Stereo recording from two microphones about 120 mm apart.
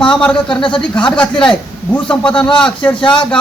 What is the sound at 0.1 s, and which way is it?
A man's voice, 5° left (ahead or behind).